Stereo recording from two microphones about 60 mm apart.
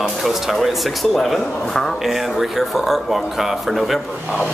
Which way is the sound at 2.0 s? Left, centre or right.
Centre.